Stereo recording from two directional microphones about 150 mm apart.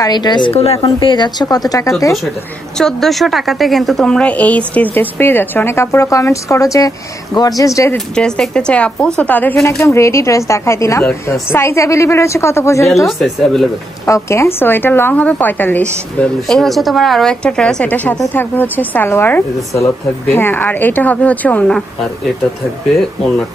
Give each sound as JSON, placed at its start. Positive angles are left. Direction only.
{"t": 0.0, "sound": "a woman's voice", "side_deg": 30}
{"t": 0.9, "sound": "a woman's voice", "side_deg": 30}
{"t": 2.8, "sound": "a woman's voice", "side_deg": 0}
{"t": 8.1, "sound": "a woman's voice", "side_deg": 5}
{"t": 13.0, "sound": "speech", "side_deg": 0}
{"t": 14.0, "sound": "a woman's voice", "side_deg": 20}